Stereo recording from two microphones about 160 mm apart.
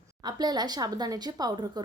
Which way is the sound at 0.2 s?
25° right (ahead or behind).